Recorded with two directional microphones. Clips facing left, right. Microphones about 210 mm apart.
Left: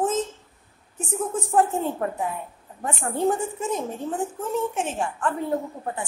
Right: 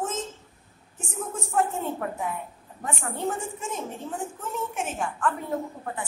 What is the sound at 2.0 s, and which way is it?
A woman's voice, 35° left (ahead or behind).